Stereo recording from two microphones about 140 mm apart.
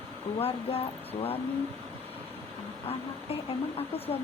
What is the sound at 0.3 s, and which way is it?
Speech, 45° left (ahead or behind).